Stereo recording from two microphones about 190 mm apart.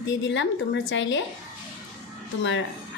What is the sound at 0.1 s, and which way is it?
A woman's voice, 70° left (ahead or behind).